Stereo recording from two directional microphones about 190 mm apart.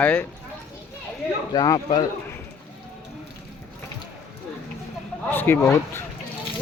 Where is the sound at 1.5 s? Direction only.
20° left (ahead or behind).